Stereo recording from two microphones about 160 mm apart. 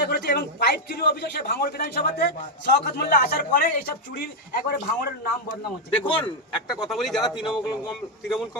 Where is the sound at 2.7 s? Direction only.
85° left; by 3.7 s 65° left (ahead or behind).